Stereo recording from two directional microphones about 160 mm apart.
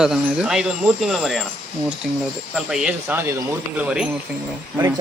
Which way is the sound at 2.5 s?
5° right (ahead or behind).